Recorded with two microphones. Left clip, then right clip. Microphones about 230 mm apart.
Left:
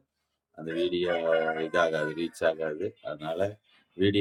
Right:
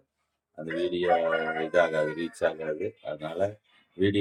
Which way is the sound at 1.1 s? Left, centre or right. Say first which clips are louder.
Right 1 dB; left.